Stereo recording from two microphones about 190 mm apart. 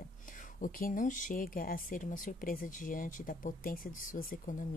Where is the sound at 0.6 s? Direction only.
45° left (ahead or behind).